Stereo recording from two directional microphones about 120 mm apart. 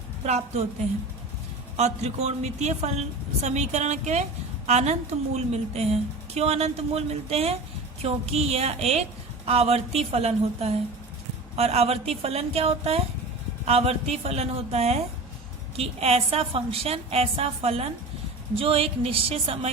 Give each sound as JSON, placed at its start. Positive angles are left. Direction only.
{"t": 0.3, "sound": "a woman's voice", "side_deg": -65}
{"t": 1.7, "sound": "a woman's voice", "side_deg": -65}
{"t": 3.4, "sound": "a woman's voice", "side_deg": -75}